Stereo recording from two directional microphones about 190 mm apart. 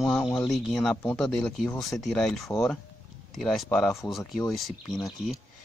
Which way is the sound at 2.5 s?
10° left (ahead or behind).